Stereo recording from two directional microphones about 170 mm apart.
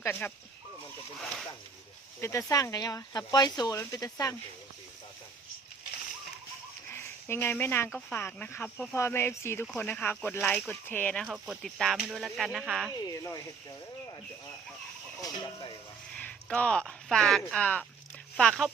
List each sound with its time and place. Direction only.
0.0 s speech: 10° left (ahead or behind)
2.2 s speech: 20° left (ahead or behind)
6.9 s a sound: 15° left (ahead or behind)
7.9 s speech: 10° left (ahead or behind)
13.1 s speech: 20° left (ahead or behind)
16.1 s speech: 5° left (ahead or behind)